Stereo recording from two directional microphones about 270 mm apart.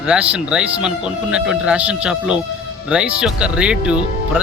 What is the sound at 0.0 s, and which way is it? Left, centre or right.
Speech, centre.